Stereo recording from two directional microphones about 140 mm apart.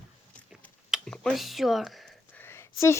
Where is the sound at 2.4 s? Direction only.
20° left (ahead or behind).